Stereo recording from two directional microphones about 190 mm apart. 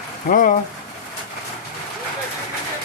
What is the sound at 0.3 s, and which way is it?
Speech, 45° left (ahead or behind).